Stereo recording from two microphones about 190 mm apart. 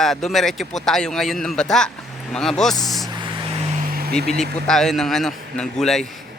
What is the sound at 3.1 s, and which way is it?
Vehicle, 25° right (ahead or behind).